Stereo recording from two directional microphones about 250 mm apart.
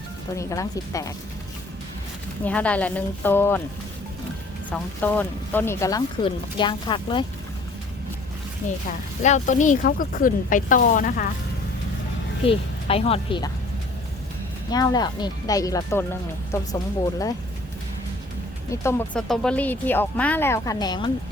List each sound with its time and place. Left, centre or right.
0.3 s speech: centre
2.4 s speech: centre
4.7 s speech: centre
8.9 s speech: left
12.5 s speech: left
14.7 s speech: centre
18.7 s speech: centre